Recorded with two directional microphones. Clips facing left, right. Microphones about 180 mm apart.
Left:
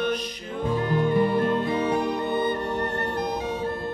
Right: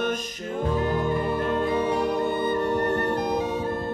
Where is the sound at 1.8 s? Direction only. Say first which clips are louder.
Right 1 dB; 50° right (ahead or behind).